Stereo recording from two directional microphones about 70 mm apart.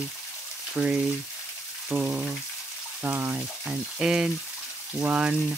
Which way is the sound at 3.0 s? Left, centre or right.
Right.